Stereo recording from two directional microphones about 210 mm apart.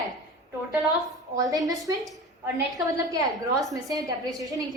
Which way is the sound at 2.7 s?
15° right (ahead or behind).